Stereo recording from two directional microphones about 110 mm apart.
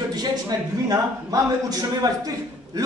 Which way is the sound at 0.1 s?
35° right (ahead or behind).